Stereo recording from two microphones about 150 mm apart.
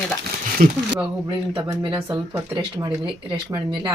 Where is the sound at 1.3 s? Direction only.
30° right (ahead or behind).